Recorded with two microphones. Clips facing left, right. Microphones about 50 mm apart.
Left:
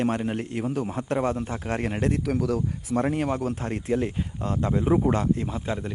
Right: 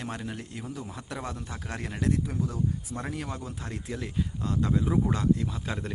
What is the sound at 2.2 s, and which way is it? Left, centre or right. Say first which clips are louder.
Speech: left 6 dB; left.